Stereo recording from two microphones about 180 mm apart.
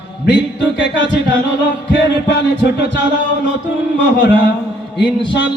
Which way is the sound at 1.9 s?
75° left (ahead or behind).